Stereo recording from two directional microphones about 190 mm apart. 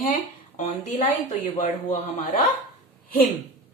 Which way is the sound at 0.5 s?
40° left (ahead or behind).